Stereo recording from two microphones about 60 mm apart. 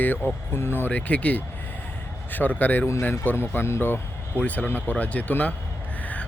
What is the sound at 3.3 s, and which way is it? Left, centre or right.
Speech, left.